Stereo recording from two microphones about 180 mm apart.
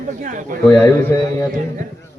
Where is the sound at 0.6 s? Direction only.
10° left (ahead or behind).